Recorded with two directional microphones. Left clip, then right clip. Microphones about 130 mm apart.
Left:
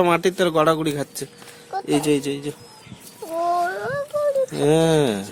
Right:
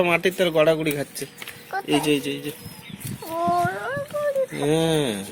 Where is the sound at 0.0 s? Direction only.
40° left (ahead or behind).